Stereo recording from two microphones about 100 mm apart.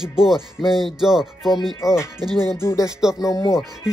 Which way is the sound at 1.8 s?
30° left (ahead or behind).